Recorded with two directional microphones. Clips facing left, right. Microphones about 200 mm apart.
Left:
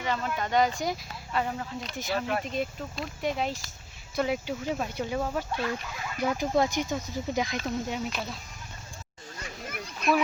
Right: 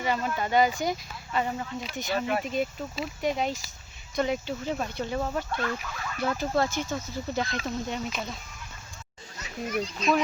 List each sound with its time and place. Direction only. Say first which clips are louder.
0.0 s speech: right 2 dB; 10° right (ahead or behind)
9.4 s a child's voice: right 9 dB; 55° left (ahead or behind)